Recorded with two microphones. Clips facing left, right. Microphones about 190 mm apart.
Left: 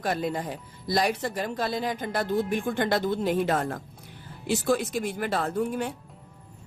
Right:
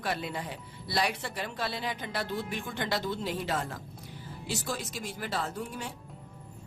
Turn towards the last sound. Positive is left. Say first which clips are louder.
# left 9 dB
turn(degrees=55)  # may be behind; listen again after turning